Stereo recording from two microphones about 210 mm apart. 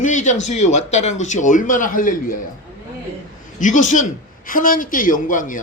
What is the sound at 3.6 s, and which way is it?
Speech, 35° left (ahead or behind).